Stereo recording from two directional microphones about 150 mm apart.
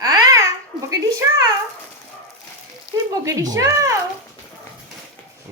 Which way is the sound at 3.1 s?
25° right (ahead or behind).